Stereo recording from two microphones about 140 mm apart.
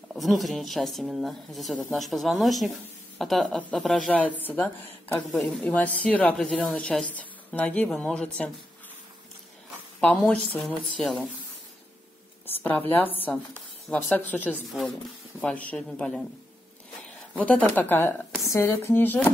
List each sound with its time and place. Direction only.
0.1 s speech: centre (ahead or behind)
9.9 s speech: 10° left (ahead or behind)
12.4 s speech: 15° left (ahead or behind)
17.3 s speech: 10° left (ahead or behind)